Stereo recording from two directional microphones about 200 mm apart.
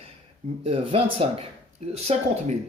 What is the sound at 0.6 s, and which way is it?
Speech, 30° right (ahead or behind).